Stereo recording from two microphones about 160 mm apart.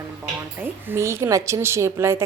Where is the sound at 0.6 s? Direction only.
15° right (ahead or behind).